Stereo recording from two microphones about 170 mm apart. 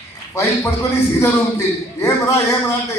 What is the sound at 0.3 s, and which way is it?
A man's voice, 15° left (ahead or behind).